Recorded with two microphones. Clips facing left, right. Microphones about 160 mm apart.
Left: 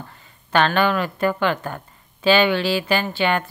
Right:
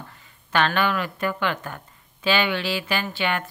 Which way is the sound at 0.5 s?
35° left (ahead or behind).